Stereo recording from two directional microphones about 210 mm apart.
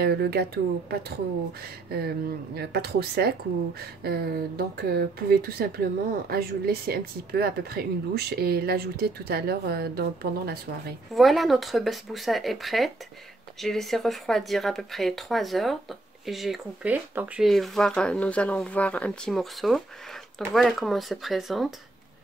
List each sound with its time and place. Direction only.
0.0 s speech: 50° right (ahead or behind)
11.1 s speech: centre (ahead or behind)